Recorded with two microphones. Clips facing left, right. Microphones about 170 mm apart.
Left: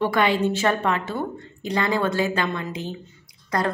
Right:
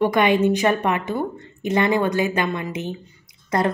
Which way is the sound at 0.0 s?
20° right (ahead or behind).